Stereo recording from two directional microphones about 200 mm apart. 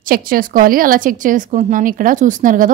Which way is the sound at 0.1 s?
45° right (ahead or behind).